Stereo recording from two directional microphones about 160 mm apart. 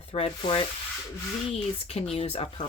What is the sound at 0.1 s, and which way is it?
Speech, 35° left (ahead or behind).